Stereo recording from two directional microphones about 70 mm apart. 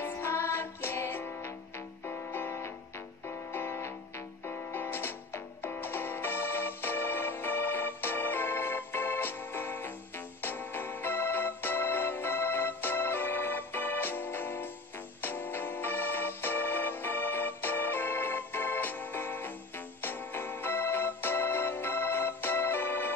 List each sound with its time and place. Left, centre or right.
0.0 s music: left
10.4 s organ: left
15.2 s music: left
20.0 s organ: left